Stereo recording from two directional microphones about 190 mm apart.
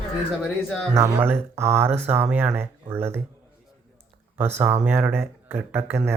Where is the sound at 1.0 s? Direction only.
10° right (ahead or behind).